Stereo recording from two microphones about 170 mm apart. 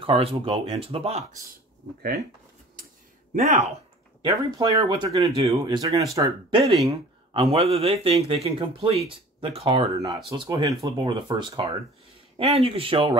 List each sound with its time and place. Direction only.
0.0 s speech: 35° right (ahead or behind)
3.3 s speech: 40° right (ahead or behind)
4.2 s speech: 20° right (ahead or behind)
6.6 s speech: centre (ahead or behind)
6.9 s speech: 30° right (ahead or behind)